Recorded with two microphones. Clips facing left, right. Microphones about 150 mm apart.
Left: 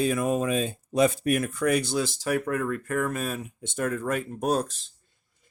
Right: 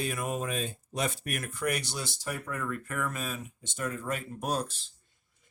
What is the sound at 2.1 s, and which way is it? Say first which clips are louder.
Speech: left 10 dB; 85° left.